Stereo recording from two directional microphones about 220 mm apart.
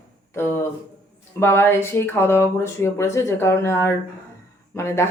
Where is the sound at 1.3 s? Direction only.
10° left (ahead or behind).